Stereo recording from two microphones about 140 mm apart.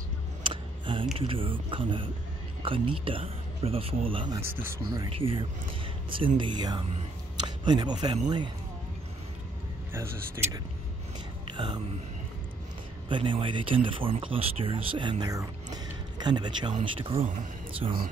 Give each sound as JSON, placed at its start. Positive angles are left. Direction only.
{"t": 0.4, "sound": "a sound", "side_deg": -35}
{"t": 1.1, "sound": "speech", "side_deg": -40}
{"t": 4.4, "sound": "speech", "side_deg": -15}
{"t": 4.8, "sound": "speech", "side_deg": -30}
{"t": 5.1, "sound": "speech", "side_deg": -40}
{"t": 9.9, "sound": "speech", "side_deg": -20}
{"t": 11.5, "sound": "speech", "side_deg": -35}
{"t": 13.1, "sound": "speech", "side_deg": -35}